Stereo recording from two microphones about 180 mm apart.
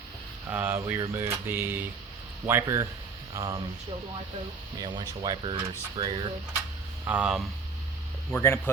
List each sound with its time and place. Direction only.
0.5 s speech: 10° right (ahead or behind)
4.8 s speech: 25° right (ahead or behind)
7.0 s speech: 10° right (ahead or behind)
8.3 s speech: 15° left (ahead or behind)